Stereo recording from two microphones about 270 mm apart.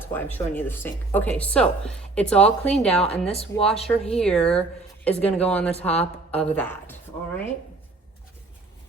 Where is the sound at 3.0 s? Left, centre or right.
Left.